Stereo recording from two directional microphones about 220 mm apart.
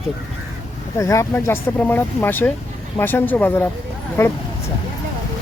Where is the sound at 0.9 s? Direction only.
15° left (ahead or behind).